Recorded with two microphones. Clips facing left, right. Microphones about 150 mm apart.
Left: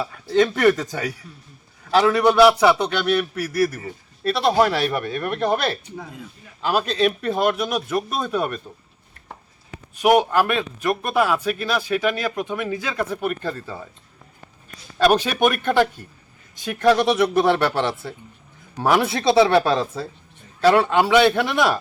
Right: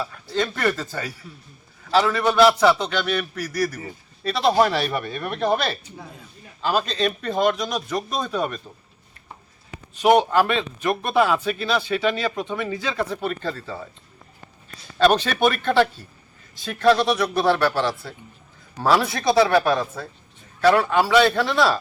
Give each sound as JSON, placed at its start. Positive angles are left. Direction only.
{"t": 0.0, "sound": "speech", "side_deg": 20}
{"t": 6.6, "sound": "speech", "side_deg": 10}
{"t": 10.0, "sound": "speech", "side_deg": 10}
{"t": 14.9, "sound": "speech", "side_deg": 10}